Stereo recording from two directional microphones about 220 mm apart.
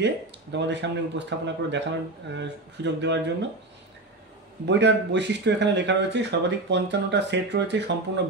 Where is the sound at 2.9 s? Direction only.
50° right (ahead or behind).